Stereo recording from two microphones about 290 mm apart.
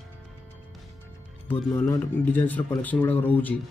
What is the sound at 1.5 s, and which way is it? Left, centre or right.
Speech, centre.